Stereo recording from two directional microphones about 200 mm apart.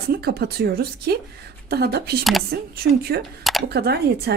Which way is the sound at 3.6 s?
55° right (ahead or behind).